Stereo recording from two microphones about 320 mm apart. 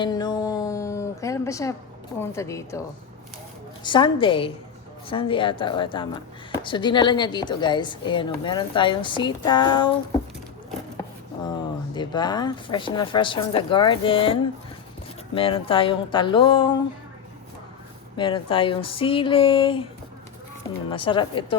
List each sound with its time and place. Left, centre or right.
0.0 s a sound: centre
2.1 s a woman's voice: centre
3.8 s a woman's voice: centre
11.9 s a woman's voice: centre
15.4 s a woman's voice: centre
18.2 s a woman's voice: centre
20.9 s a woman's voice: centre